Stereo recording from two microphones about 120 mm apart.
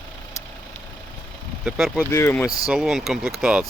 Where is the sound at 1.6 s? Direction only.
10° right (ahead or behind).